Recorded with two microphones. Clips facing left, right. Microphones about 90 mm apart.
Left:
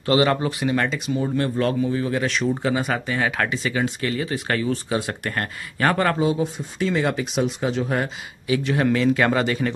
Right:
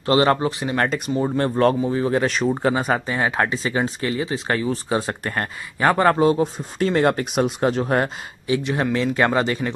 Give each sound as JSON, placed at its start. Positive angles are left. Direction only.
{"t": 0.0, "sound": "a man's voice", "side_deg": -35}
{"t": 0.8, "sound": "speech", "side_deg": -45}
{"t": 6.1, "sound": "speech", "side_deg": -55}
{"t": 8.5, "sound": "a man's voice", "side_deg": -30}